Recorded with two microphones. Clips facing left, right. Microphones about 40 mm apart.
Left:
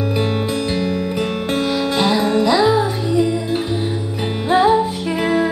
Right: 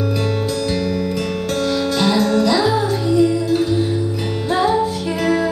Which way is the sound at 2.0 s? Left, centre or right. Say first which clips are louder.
Even; left.